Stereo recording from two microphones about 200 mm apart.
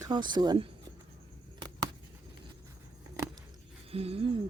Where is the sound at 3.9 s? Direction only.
30° right (ahead or behind).